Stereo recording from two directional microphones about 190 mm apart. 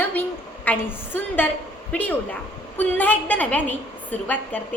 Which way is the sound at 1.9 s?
10° left (ahead or behind).